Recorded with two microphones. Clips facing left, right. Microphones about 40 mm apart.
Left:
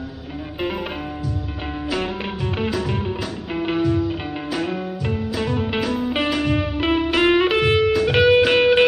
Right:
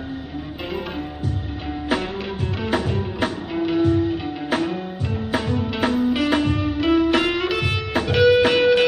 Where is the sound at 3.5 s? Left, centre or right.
Left.